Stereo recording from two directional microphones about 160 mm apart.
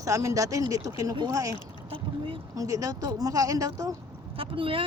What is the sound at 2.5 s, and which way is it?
Speech, 20° right (ahead or behind).